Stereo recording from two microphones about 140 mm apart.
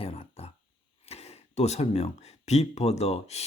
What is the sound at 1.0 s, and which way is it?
Speech, 45° left (ahead or behind).